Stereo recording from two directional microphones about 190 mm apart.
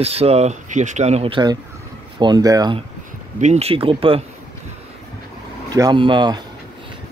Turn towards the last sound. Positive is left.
turn(degrees=-25)  # may be behind; listen again after turning